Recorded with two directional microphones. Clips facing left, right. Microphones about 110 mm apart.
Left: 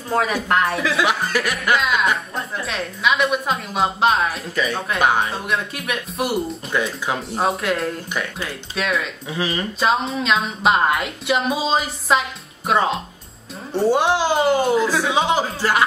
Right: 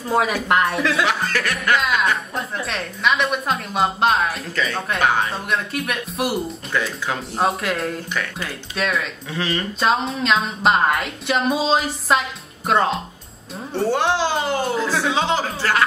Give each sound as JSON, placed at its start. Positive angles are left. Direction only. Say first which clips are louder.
{"t": 0.1, "sound": "speech", "louder": "right 1 dB", "side_deg": -5}
{"t": 1.0, "sound": "speech", "louder": "left 1 dB", "side_deg": 15}
{"t": 1.8, "sound": "speech", "louder": "even", "side_deg": 0}
{"t": 4.6, "sound": "speech", "louder": "left 2 dB", "side_deg": 15}
{"t": 5.3, "sound": "speech", "louder": "even", "side_deg": 0}
{"t": 6.7, "sound": "speech", "louder": "left 1 dB", "side_deg": 20}
{"t": 7.2, "sound": "speech", "louder": "right 2 dB", "side_deg": 0}
{"t": 9.3, "sound": "speech", "louder": "left 1 dB", "side_deg": 15}
{"t": 9.8, "sound": "speech", "louder": "even", "side_deg": 0}
{"t": 13.7, "sound": "speech", "louder": "left 2 dB", "side_deg": 15}